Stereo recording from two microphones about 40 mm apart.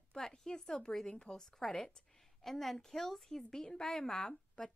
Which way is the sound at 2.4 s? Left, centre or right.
Centre.